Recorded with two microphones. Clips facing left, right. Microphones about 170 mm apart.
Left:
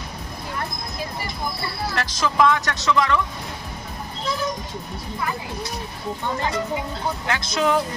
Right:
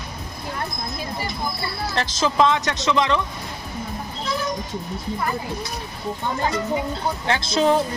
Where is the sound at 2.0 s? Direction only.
25° right (ahead or behind).